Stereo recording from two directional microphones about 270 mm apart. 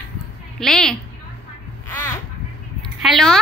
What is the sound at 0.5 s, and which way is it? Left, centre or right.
Speech, centre.